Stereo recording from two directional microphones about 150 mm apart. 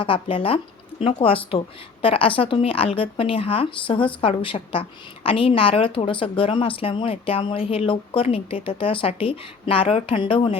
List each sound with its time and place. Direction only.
0.0 s speech: 35° left (ahead or behind)